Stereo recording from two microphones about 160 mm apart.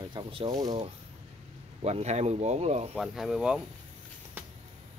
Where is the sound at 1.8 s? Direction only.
40° right (ahead or behind).